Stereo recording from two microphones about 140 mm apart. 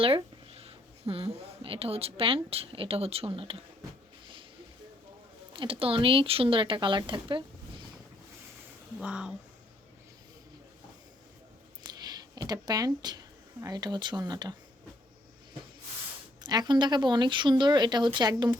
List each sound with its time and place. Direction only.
0.0 s speech: 40° right (ahead or behind)
5.5 s speech: 40° right (ahead or behind)
9.0 s speech: 5° right (ahead or behind)
11.8 s speech: 30° right (ahead or behind)
16.4 s speech: 30° right (ahead or behind)